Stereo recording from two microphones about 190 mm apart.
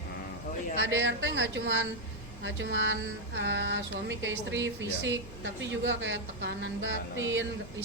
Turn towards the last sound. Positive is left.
turn(degrees=-80)